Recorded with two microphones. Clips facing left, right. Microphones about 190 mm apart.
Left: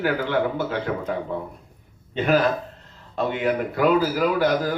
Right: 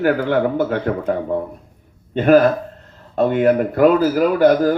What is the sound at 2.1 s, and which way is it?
Speech, 50° right (ahead or behind).